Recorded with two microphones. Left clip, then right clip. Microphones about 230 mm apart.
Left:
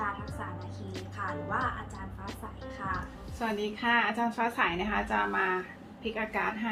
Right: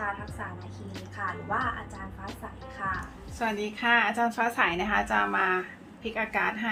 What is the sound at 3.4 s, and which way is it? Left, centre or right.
A woman's voice, right.